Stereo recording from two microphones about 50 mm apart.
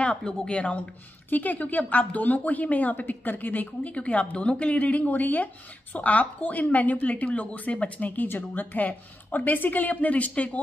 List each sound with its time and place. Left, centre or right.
0.5 s a woman's voice: left